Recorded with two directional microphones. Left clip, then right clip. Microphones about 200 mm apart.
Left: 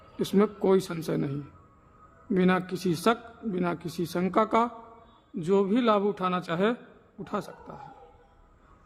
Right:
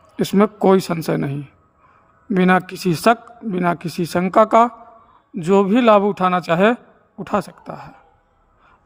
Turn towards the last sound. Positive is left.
turn(degrees=-40)  # may be behind; listen again after turning